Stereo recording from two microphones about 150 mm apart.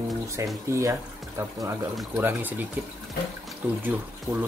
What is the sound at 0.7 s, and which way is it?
Speech, 20° right (ahead or behind).